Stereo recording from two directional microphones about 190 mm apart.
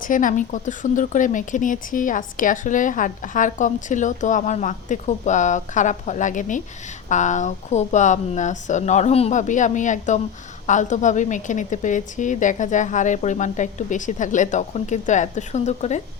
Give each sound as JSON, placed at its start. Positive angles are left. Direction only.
{"t": 0.0, "sound": "a woman's voice", "side_deg": 45}